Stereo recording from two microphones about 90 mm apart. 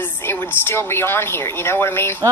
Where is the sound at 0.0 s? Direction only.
25° left (ahead or behind).